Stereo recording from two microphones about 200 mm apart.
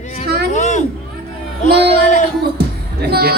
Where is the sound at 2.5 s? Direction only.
55° right (ahead or behind).